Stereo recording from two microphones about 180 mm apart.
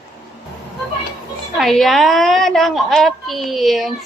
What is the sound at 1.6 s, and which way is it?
A woman's voice, centre (ahead or behind).